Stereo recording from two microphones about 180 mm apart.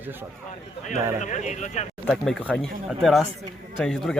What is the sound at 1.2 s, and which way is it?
Speech, 40° left (ahead or behind).